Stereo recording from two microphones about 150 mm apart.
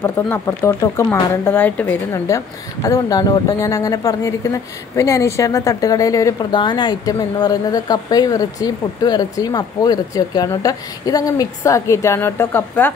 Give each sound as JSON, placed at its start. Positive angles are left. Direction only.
{"t": 0.0, "sound": "speech", "side_deg": 15}